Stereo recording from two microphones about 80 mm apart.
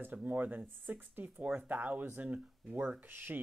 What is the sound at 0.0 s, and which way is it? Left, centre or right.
Speech, right.